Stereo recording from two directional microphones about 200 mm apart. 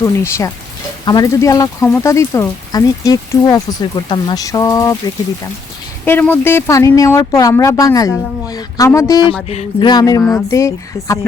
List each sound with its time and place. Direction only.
0.0 s speech: 15° left (ahead or behind)
9.5 s music: 35° left (ahead or behind)
9.9 s speech: 20° left (ahead or behind)